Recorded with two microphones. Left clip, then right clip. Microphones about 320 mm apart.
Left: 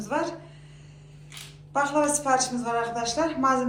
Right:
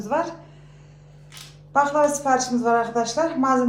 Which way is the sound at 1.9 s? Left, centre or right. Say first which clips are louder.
Right 4 dB; right.